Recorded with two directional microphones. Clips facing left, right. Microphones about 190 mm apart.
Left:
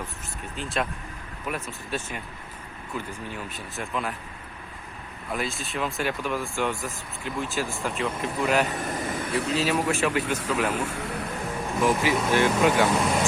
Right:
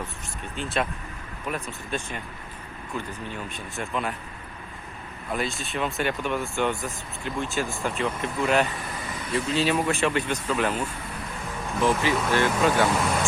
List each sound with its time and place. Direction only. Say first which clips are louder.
0.5 s speech: right 1 dB; centre (ahead or behind)
5.3 s speech: right 1 dB; centre (ahead or behind)
8.7 s speech: left 5 dB; 45° left (ahead or behind); by 9.6 s 65° left (ahead or behind)
9.6 s speech: right 2 dB; 5° left (ahead or behind)
10.8 s speech: left 2 dB; 80° left
11.8 s speech: even; 10° left (ahead or behind)